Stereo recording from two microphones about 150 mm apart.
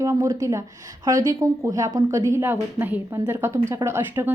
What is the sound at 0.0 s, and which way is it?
A woman's voice, 20° right (ahead or behind).